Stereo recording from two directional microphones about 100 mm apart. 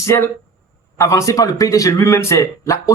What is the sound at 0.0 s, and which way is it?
Speech, 25° left (ahead or behind).